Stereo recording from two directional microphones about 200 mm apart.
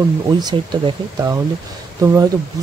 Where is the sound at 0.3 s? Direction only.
20° right (ahead or behind).